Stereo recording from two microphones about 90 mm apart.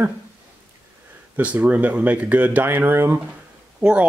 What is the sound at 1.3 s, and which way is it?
Speech, 15° right (ahead or behind).